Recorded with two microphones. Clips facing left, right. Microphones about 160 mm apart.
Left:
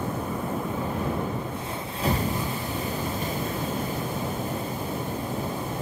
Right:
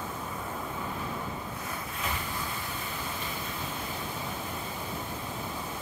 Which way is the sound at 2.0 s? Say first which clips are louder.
Left 11 dB; 35° left (ahead or behind).